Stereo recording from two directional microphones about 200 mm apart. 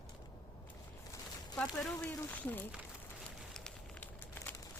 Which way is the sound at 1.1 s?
15° left (ahead or behind).